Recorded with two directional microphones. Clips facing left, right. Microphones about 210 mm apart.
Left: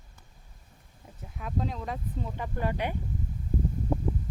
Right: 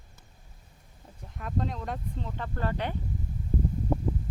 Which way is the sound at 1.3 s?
Centre (ahead or behind).